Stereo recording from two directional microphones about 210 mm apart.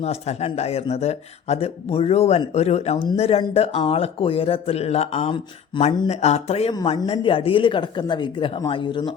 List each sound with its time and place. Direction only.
0.0 s speech: 30° left (ahead or behind)